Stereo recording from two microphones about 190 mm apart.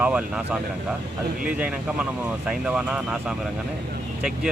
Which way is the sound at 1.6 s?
5° right (ahead or behind).